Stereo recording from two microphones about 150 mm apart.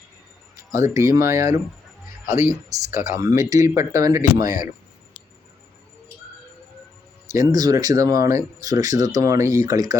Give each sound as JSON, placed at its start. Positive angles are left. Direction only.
{"t": 0.7, "sound": "speech", "side_deg": -20}
{"t": 7.3, "sound": "speech", "side_deg": -25}